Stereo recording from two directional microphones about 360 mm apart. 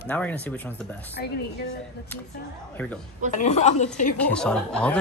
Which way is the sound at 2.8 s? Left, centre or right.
Centre.